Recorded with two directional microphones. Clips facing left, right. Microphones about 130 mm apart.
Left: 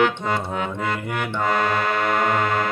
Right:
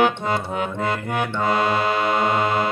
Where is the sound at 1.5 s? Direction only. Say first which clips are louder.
Right 1 dB; 15° right (ahead or behind).